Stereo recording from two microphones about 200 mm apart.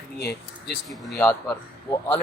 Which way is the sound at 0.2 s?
55° left (ahead or behind).